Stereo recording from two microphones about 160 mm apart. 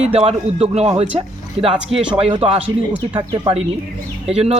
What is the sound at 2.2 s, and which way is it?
Speech, 35° right (ahead or behind).